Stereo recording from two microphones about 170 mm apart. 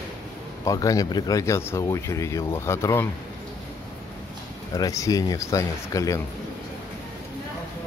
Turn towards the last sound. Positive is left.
turn(degrees=20)  # may be behind; listen again after turning